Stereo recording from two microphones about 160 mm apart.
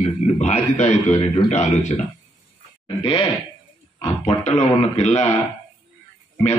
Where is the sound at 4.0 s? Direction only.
40° left (ahead or behind).